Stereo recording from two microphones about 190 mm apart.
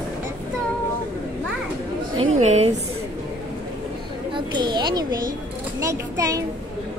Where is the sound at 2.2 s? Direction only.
35° right (ahead or behind).